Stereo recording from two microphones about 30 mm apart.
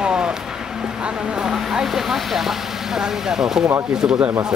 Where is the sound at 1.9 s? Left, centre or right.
Centre.